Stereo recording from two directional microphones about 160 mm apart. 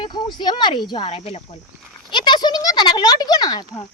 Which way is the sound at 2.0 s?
30° left (ahead or behind).